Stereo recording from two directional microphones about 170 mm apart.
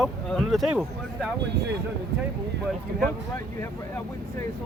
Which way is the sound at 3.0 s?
10° left (ahead or behind).